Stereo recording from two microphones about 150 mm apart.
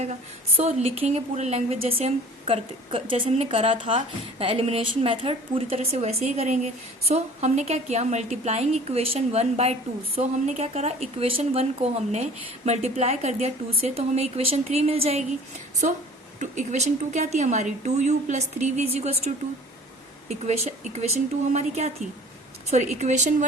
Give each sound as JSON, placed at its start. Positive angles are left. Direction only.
{"t": 0.0, "sound": "a woman's voice", "side_deg": -50}
{"t": 16.4, "sound": "a woman's voice", "side_deg": -50}